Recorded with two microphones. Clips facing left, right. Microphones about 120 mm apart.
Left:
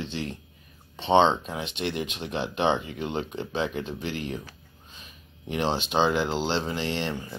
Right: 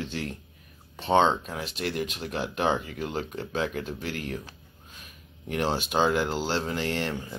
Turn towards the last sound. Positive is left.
turn(degrees=-5)  # may be behind; listen again after turning